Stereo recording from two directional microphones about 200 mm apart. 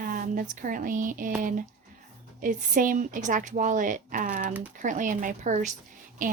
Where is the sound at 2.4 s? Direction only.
40° right (ahead or behind).